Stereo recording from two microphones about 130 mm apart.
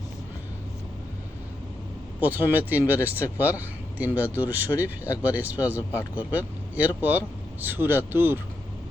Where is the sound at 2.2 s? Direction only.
15° right (ahead or behind).